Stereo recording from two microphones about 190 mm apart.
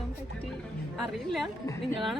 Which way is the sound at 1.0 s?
Centre (ahead or behind).